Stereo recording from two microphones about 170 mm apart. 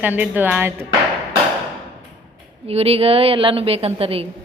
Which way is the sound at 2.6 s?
35° right (ahead or behind).